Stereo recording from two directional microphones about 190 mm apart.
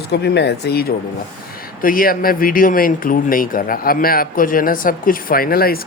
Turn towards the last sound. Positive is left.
turn(degrees=50)  # may be behind; listen again after turning